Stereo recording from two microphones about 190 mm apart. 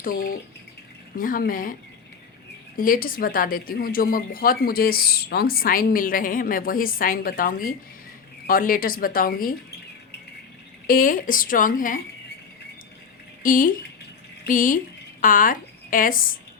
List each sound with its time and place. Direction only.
0.0 s speech: 45° left (ahead or behind)
2.7 s speech: 45° left (ahead or behind)
10.8 s speech: 45° left (ahead or behind)
13.4 s a woman's voice: 45° left (ahead or behind)